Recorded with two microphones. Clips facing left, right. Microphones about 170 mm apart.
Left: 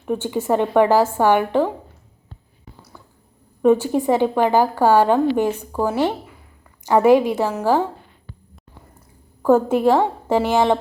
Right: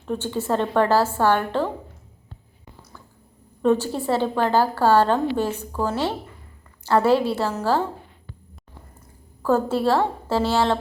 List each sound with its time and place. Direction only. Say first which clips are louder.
0.0 s a woman's voice: left 4 dB; 15° left (ahead or behind)
3.6 s a woman's voice: left 5 dB; 15° left (ahead or behind)
9.4 s a woman's voice: left 5 dB; 15° left (ahead or behind)